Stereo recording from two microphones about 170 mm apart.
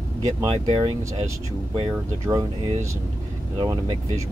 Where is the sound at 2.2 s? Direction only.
20° right (ahead or behind).